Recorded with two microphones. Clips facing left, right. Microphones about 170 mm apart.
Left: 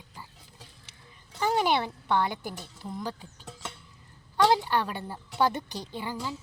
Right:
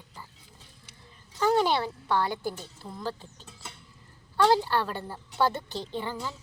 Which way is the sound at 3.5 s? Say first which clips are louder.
Left 7 dB; 90° left.